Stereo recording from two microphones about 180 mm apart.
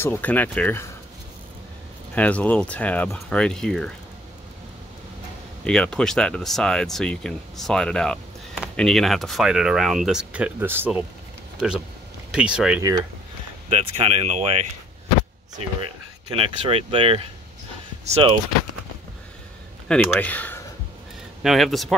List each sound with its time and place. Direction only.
0.0 s speech: 10° left (ahead or behind)
2.1 s speech: 10° left (ahead or behind)
5.6 s speech: 5° left (ahead or behind)
12.3 s speech: 5° right (ahead or behind)
13.7 s speech: 35° right (ahead or behind)
15.8 s speech: 30° right (ahead or behind)
19.9 s speech: 10° left (ahead or behind)